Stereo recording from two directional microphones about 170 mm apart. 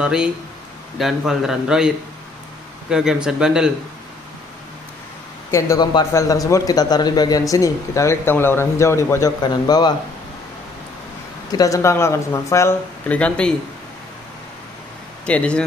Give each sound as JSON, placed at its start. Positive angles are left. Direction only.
{"t": 0.0, "sound": "speech", "side_deg": -5}
{"t": 2.9, "sound": "speech", "side_deg": -5}
{"t": 5.5, "sound": "a man's voice", "side_deg": 20}
{"t": 11.5, "sound": "speech", "side_deg": 20}
{"t": 15.2, "sound": "speech", "side_deg": 5}